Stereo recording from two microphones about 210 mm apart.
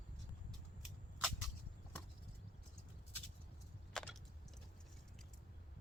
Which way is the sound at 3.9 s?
5° left (ahead or behind).